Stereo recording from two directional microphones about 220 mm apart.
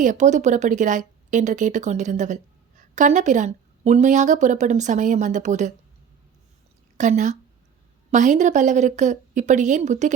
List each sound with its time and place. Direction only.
0.0 s speech: 35° right (ahead or behind)
6.9 s a woman's voice: 35° right (ahead or behind)